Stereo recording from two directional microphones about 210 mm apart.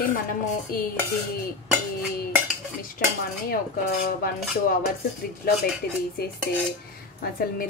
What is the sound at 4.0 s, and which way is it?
Speech, 45° left (ahead or behind).